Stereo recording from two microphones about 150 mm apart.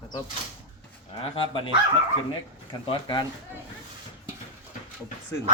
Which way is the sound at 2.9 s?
30° left (ahead or behind).